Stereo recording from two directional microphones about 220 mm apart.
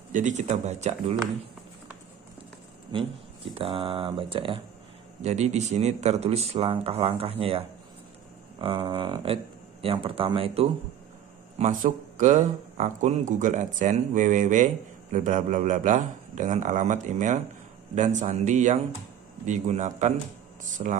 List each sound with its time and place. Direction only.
0.1 s speech: 35° right (ahead or behind)
3.5 s speech: 25° right (ahead or behind)